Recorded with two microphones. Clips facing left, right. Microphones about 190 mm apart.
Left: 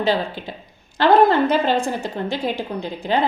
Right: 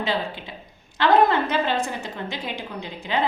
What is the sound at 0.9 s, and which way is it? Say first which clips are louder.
A woman's voice: left 4 dB; 35° left (ahead or behind).